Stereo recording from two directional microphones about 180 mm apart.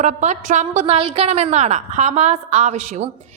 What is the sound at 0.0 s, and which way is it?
A woman's voice, 40° right (ahead or behind).